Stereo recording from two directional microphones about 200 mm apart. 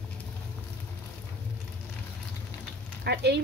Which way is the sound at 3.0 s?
55° right (ahead or behind).